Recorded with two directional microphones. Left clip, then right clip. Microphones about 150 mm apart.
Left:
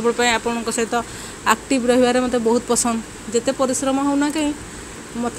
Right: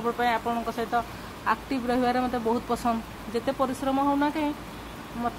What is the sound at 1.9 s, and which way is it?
Speech, 20° left (ahead or behind).